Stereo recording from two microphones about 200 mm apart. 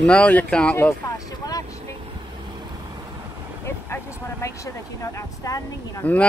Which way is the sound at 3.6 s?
15° left (ahead or behind).